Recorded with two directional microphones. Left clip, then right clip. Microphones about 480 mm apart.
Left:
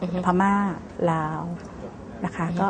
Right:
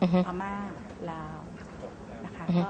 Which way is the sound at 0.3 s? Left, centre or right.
Left.